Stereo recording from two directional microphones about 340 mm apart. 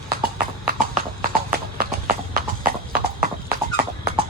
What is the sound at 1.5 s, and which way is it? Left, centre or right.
Clip-clop, right.